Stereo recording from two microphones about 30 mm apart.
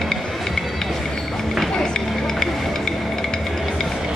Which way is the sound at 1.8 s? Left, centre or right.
Centre.